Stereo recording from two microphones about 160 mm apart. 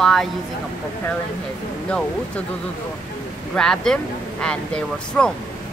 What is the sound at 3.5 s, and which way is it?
Speech, 5° left (ahead or behind).